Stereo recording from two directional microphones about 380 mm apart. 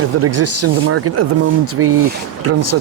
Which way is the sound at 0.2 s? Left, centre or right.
Right.